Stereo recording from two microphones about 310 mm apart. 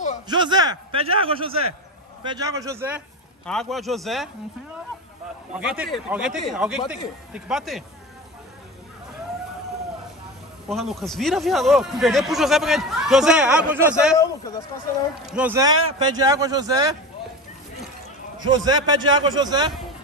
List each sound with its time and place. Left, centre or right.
0.3 s a man's voice: centre
5.5 s speech: centre
10.7 s speech: centre
15.3 s speech: centre
18.4 s speech: centre